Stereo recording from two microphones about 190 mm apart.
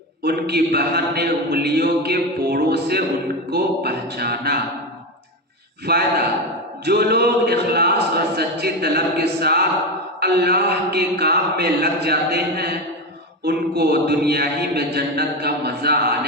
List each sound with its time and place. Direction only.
0.2 s a man's voice: 60° right (ahead or behind)
5.8 s a man's voice: 55° right (ahead or behind)